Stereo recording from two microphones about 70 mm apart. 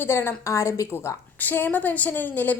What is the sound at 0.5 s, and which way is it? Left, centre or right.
Speech, left.